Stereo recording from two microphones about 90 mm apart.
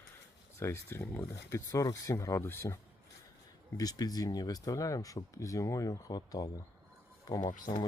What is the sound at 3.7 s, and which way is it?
Speech, 45° left (ahead or behind).